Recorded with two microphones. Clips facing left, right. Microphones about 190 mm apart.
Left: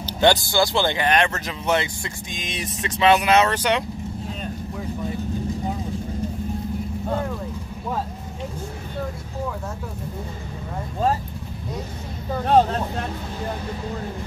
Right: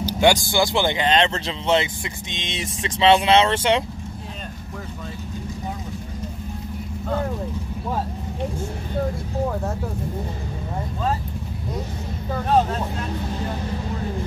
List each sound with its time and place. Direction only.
0.0 s speech: 15° right (ahead or behind)